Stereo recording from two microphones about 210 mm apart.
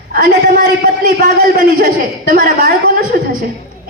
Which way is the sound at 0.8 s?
40° right (ahead or behind).